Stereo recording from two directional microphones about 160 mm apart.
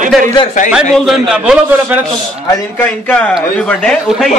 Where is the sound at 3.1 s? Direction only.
10° left (ahead or behind).